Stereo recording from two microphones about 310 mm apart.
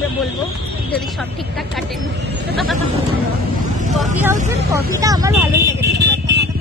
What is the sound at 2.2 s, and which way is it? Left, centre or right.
Speech, right.